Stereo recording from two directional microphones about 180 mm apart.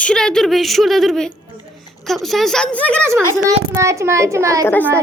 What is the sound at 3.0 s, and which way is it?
A child's voice, 15° right (ahead or behind).